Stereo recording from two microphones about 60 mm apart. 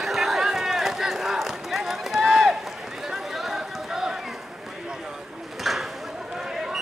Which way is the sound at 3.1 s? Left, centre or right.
Centre.